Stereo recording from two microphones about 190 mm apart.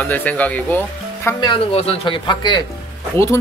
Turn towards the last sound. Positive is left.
turn(degrees=15)  # may be behind; listen again after turning